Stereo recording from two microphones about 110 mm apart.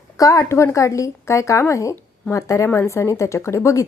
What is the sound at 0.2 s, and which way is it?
A woman's voice, 30° left (ahead or behind).